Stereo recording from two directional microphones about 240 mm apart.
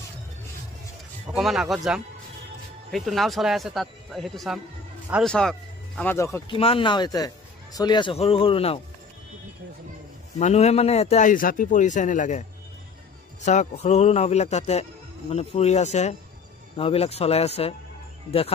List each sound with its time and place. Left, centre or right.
1.3 s a man's voice: centre; by 8.8 s left
10.4 s a man's voice: left